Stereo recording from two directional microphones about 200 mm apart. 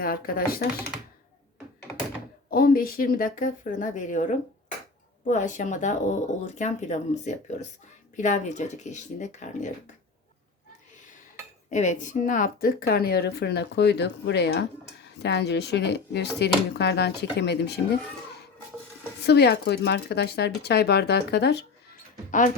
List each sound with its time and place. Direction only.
0.0 s speech: 45° left (ahead or behind)
2.5 s speech: 50° left (ahead or behind)
11.7 s speech: 35° left (ahead or behind); by 17.7 s 55° left (ahead or behind)
19.2 s speech: 55° left (ahead or behind)